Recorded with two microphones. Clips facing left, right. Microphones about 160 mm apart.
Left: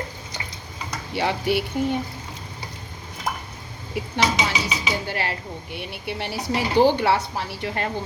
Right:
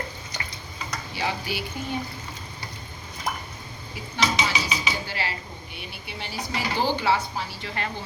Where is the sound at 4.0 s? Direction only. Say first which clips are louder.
Left 11 dB; 65° left (ahead or behind).